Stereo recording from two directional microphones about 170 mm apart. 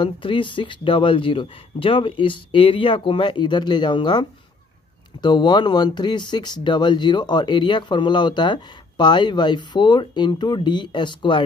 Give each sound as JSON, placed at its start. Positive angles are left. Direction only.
{"t": 0.0, "sound": "speech", "side_deg": 30}